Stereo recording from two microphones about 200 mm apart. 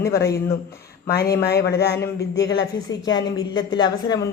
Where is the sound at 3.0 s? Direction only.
20° left (ahead or behind).